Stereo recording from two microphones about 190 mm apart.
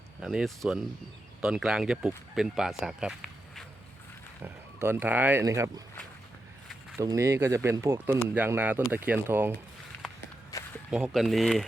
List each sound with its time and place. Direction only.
0.2 s speech: centre (ahead or behind)
4.4 s speech: 10° right (ahead or behind)
6.9 s speech: 15° right (ahead or behind)
10.5 s walk: 20° left (ahead or behind)
10.9 s speech: centre (ahead or behind)